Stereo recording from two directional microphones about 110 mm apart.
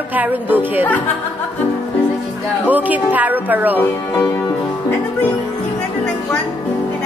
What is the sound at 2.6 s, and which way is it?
A woman's voice, 15° right (ahead or behind).